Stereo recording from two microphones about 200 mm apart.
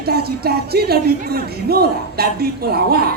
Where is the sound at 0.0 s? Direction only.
50° right (ahead or behind).